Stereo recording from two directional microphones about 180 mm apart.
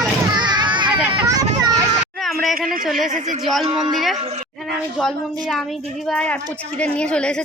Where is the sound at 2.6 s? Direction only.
50° right (ahead or behind).